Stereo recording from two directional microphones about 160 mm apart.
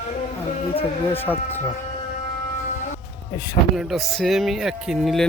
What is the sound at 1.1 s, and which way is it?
Speech, 10° left (ahead or behind).